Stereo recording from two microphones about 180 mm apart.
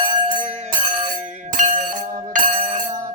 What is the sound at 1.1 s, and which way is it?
Music, 50° right (ahead or behind).